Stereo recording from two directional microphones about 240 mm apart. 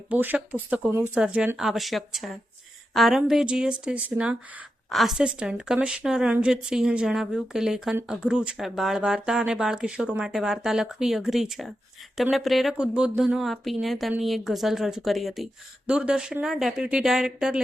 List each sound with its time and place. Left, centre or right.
0.1 s a woman's voice: centre